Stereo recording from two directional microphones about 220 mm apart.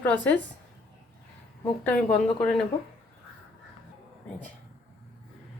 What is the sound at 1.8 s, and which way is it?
Speech, 5° left (ahead or behind).